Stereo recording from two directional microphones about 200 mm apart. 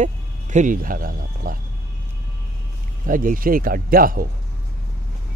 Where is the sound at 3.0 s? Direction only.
40° right (ahead or behind).